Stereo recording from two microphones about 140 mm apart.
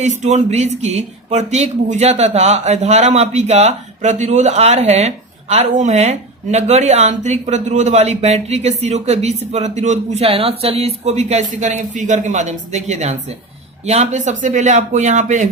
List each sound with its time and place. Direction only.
0.0 s speech: 55° right (ahead or behind)